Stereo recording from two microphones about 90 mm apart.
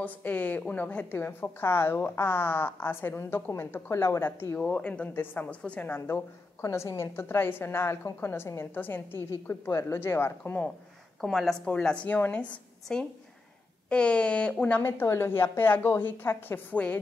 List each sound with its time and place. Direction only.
0.0 s a woman's voice: 20° left (ahead or behind)
4.6 s a woman's voice: 15° left (ahead or behind)
5.9 s a woman's voice: 30° left (ahead or behind)
11.1 s speech: centre (ahead or behind)
11.6 s a woman's voice: 10° left (ahead or behind)
14.8 s a woman's voice: 25° left (ahead or behind)